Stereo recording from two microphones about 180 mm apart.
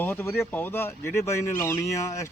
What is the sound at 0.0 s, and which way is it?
Speech, 10° left (ahead or behind).